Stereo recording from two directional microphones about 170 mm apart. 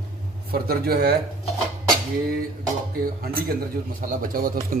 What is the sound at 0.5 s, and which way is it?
Speech, 65° right (ahead or behind).